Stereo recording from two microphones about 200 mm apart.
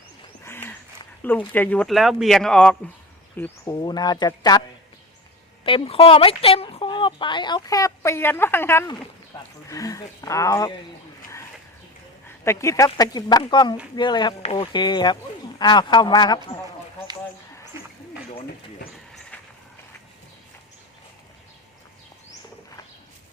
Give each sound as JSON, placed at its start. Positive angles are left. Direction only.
{"t": 0.4, "sound": "a sound", "side_deg": 10}
{"t": 1.2, "sound": "speech", "side_deg": 10}
{"t": 3.8, "sound": "speech", "side_deg": 20}
{"t": 5.6, "sound": "speech", "side_deg": 25}
{"t": 12.5, "sound": "speech", "side_deg": 15}
{"t": 17.7, "sound": "a sound", "side_deg": -15}
{"t": 19.3, "sound": "train", "side_deg": 5}